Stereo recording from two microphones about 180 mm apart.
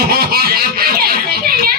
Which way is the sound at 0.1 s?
55° right (ahead or behind).